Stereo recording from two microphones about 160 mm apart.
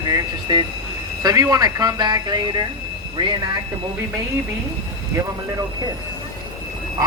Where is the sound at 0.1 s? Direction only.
25° right (ahead or behind).